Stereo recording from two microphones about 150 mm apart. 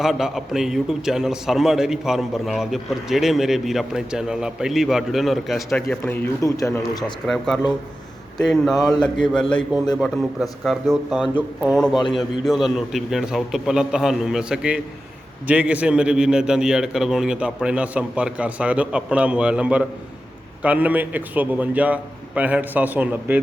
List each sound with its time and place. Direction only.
0.0 s a man's voice: centre (ahead or behind)
6.4 s speech: 20° left (ahead or behind)
7.3 s a man's voice: centre (ahead or behind)